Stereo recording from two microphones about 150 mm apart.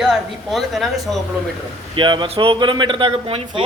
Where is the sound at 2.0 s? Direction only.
30° right (ahead or behind).